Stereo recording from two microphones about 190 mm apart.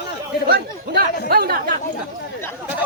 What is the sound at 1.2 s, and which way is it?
Speech, 55° right (ahead or behind).